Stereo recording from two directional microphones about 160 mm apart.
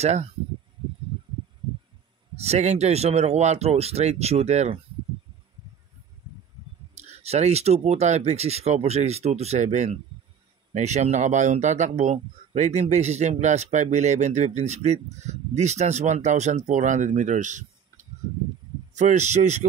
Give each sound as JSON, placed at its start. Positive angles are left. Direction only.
{"t": 0.0, "sound": "speech", "side_deg": -45}
{"t": 2.3, "sound": "speech", "side_deg": -40}
{"t": 7.0, "sound": "speech", "side_deg": -40}